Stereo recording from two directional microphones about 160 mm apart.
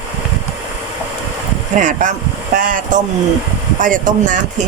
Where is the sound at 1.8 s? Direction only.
50° right (ahead or behind).